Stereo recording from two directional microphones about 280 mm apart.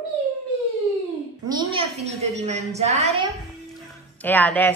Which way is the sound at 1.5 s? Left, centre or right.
Centre.